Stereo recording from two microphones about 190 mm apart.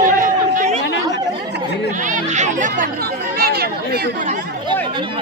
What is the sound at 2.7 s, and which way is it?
Speech, 50° right (ahead or behind).